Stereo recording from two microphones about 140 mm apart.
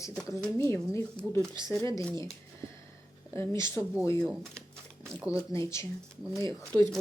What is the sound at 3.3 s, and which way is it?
Speech, 20° left (ahead or behind).